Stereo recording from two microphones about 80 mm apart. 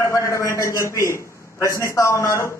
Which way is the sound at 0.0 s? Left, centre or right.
Left.